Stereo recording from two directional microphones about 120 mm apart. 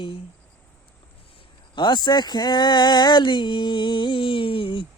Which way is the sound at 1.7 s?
40° left (ahead or behind).